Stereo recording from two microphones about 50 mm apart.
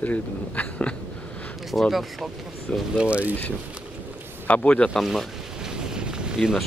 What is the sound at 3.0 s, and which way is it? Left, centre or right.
Speech, right.